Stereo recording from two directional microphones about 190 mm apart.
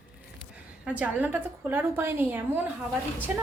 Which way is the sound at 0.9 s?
10° right (ahead or behind).